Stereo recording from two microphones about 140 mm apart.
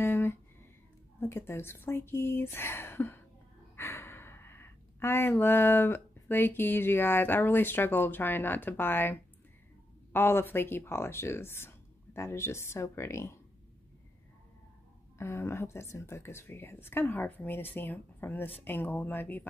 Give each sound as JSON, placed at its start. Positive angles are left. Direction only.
{"t": 0.0, "sound": "a sound", "side_deg": 15}
{"t": 1.2, "sound": "speech", "side_deg": 15}
{"t": 15.1, "sound": "speech", "side_deg": 20}